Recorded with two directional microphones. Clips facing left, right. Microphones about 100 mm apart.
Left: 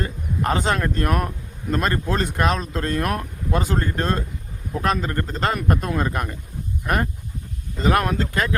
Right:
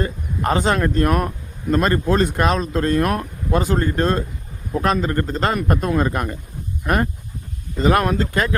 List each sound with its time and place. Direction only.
0.0 s speech: 35° right (ahead or behind)